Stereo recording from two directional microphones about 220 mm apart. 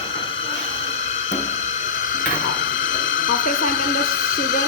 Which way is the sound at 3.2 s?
40° left (ahead or behind).